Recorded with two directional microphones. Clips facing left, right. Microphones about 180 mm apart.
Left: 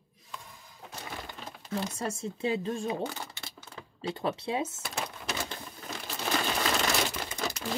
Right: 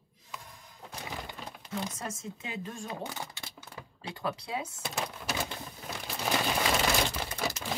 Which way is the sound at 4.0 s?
25° left (ahead or behind).